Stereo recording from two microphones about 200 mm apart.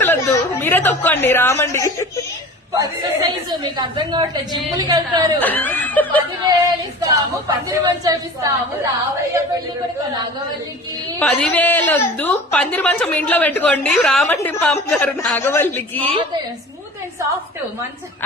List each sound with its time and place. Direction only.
0.0 s a woman's voice: 10° left (ahead or behind)
2.7 s a woman's voice: 20° right (ahead or behind)
5.4 s a woman's voice: 10° left (ahead or behind)
7.0 s a woman's voice: 20° right (ahead or behind)
11.2 s a woman's voice: 5° left (ahead or behind)